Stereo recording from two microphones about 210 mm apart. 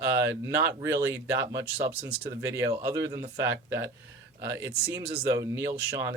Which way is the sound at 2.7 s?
15° right (ahead or behind).